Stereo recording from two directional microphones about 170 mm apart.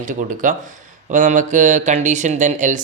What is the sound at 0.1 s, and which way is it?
Speech, 50° right (ahead or behind).